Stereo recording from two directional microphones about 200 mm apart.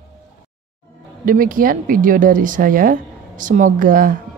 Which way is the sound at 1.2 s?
45° right (ahead or behind).